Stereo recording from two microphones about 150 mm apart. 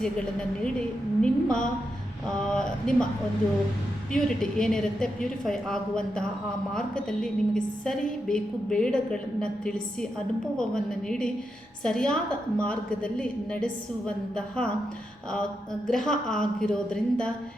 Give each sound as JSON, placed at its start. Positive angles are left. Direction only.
{"t": 0.0, "sound": "a woman's voice", "side_deg": 5}
{"t": 4.1, "sound": "a woman's voice", "side_deg": 5}
{"t": 15.9, "sound": "a woman's voice", "side_deg": 5}